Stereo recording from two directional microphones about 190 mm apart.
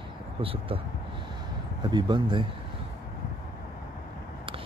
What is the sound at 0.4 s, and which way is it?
Speech, 30° right (ahead or behind).